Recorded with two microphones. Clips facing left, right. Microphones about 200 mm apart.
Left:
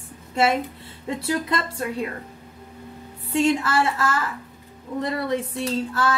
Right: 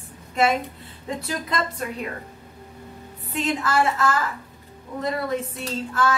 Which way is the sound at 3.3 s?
30° left (ahead or behind).